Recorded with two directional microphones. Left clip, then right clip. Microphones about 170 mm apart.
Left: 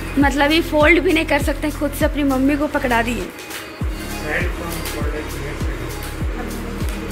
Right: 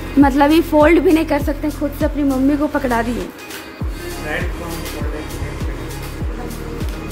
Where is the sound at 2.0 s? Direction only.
5° right (ahead or behind).